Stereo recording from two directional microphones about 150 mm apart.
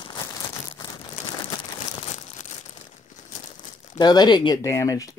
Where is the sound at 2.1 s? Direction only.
50° left (ahead or behind).